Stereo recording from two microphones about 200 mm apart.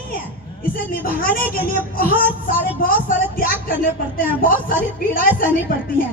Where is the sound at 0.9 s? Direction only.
45° left (ahead or behind).